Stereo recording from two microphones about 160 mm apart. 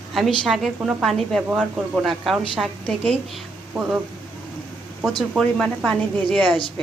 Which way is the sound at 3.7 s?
5° right (ahead or behind).